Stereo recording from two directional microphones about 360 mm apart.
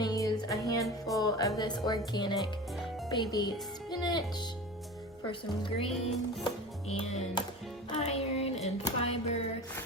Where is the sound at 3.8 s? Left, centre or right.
Centre.